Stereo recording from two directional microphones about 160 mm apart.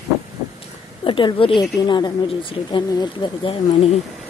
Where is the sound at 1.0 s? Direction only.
35° left (ahead or behind).